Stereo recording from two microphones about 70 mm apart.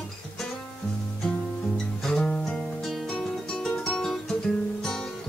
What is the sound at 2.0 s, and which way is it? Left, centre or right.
Music, centre.